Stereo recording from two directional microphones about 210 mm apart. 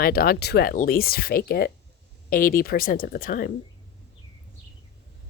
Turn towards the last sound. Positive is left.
turn(degrees=45)  # may be behind; listen again after turning